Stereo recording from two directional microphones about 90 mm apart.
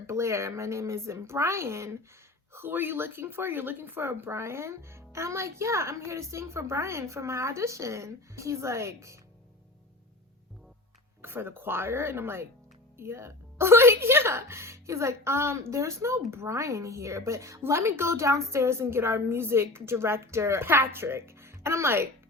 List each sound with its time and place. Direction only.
0.1 s speech: 30° right (ahead or behind)
11.2 s a woman's voice: 25° right (ahead or behind)